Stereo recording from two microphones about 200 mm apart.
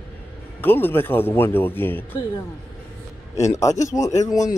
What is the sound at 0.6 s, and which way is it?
Speech, 10° left (ahead or behind).